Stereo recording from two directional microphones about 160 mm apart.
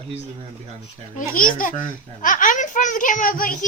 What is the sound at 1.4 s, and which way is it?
A child's voice, 60° left (ahead or behind).